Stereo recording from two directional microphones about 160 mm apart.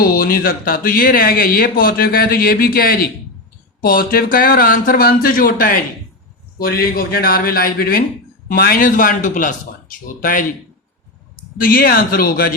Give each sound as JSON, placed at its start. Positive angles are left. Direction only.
{"t": 0.0, "sound": "speech", "side_deg": 65}
{"t": 11.6, "sound": "speech", "side_deg": 65}